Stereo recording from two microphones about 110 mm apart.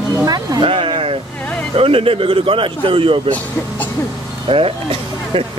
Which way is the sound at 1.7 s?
60° right (ahead or behind).